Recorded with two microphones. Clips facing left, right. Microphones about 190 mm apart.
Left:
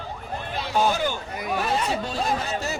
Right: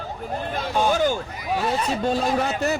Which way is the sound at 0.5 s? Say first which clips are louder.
Right 1 dB; 45° right (ahead or behind).